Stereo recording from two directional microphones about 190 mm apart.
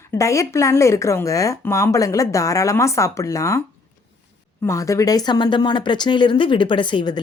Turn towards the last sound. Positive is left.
turn(degrees=25)  # may be behind; listen again after turning